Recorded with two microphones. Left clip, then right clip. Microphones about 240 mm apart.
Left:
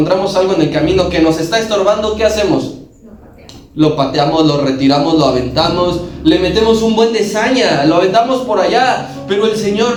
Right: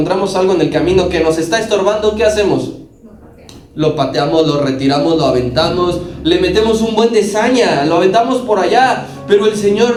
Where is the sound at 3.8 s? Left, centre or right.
Right.